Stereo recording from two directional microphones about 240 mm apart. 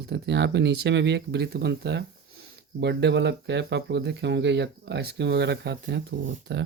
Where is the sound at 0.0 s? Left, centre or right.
Right.